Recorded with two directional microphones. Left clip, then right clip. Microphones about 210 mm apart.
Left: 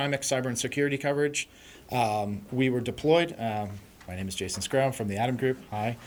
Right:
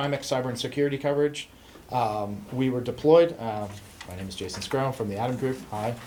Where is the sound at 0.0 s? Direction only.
50° left (ahead or behind).